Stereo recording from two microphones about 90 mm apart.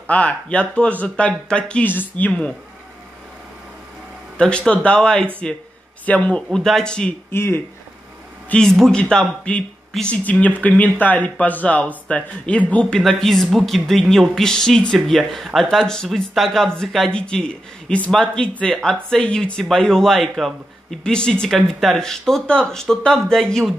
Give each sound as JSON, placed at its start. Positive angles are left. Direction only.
{"t": 0.0, "sound": "speech", "side_deg": 15}
{"t": 4.4, "sound": "speech", "side_deg": 10}
{"t": 7.2, "sound": "speech", "side_deg": 25}
{"t": 8.5, "sound": "speech", "side_deg": 5}
{"t": 13.0, "sound": "speech", "side_deg": 0}